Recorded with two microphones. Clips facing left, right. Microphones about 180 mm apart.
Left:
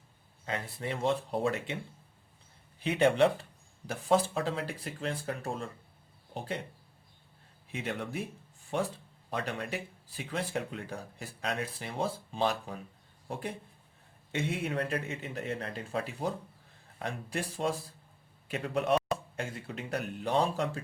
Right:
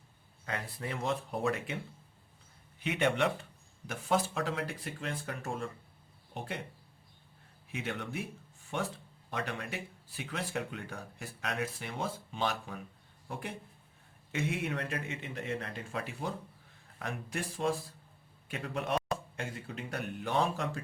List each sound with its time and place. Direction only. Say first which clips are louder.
0.4 s speech: left 3 dB; 25° left (ahead or behind)
2.8 s speech: left 5 dB; 35° left (ahead or behind)
7.8 s speech: left 2 dB; 35° left (ahead or behind)